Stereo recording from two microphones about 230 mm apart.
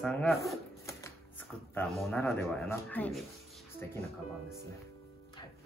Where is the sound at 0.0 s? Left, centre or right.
Centre.